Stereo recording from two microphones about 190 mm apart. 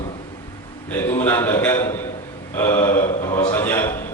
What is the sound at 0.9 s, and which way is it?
A man's voice, 10° left (ahead or behind).